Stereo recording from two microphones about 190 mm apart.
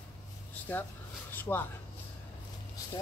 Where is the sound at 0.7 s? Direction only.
10° left (ahead or behind).